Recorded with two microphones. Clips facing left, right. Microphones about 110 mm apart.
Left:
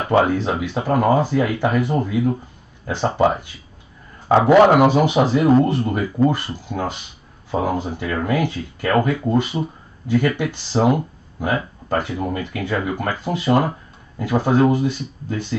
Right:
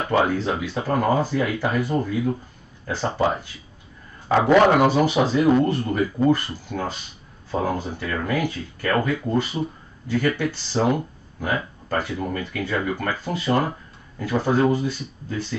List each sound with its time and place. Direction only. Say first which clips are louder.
0.2 s speech: left 3 dB; 20° left (ahead or behind)
4.5 s speech: left 3 dB; 15° left (ahead or behind)